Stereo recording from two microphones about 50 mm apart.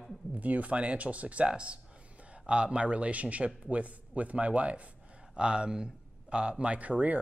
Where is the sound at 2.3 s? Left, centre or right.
Right.